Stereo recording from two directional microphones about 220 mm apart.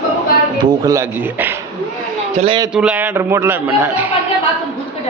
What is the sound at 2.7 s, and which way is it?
A man's voice, 5° right (ahead or behind).